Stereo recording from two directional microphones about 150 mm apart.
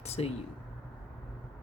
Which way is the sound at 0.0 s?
45° left (ahead or behind).